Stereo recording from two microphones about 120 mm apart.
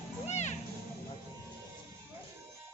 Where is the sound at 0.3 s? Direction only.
75° left (ahead or behind).